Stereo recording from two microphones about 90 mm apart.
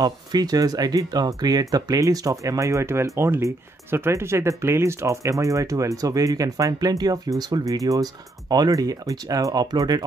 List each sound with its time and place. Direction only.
0.0 s speech: 45° right (ahead or behind)